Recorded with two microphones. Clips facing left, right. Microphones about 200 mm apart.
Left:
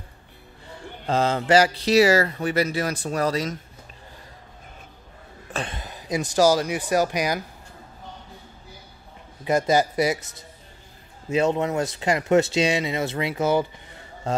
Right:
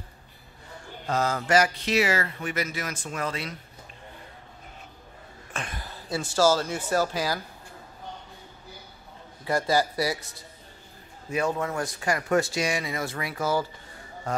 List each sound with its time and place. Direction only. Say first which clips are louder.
1.0 s speech: left 5 dB; 30° left (ahead or behind)
5.5 s throat clearing: left 6 dB; 30° left (ahead or behind)
5.8 s speech: left 3 dB; 15° left (ahead or behind)
9.4 s speech: left 4 dB; 20° left (ahead or behind)